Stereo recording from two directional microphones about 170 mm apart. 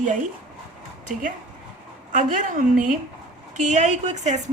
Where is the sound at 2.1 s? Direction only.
50° right (ahead or behind).